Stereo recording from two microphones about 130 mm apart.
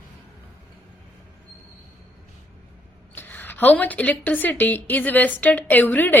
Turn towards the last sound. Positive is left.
turn(degrees=15)  # may be behind; listen again after turning